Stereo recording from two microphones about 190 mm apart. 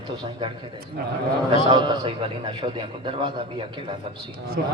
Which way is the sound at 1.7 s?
25° right (ahead or behind).